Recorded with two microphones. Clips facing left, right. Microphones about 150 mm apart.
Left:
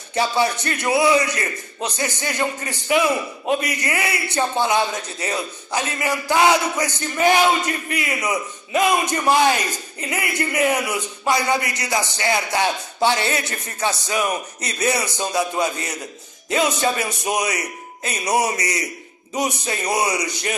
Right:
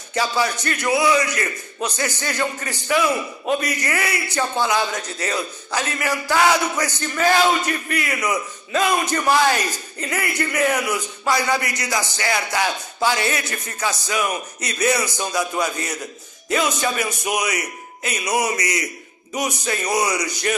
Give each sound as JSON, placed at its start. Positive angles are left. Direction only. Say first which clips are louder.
{"t": 0.1, "sound": "a man's voice", "louder": "left 2 dB", "side_deg": 25}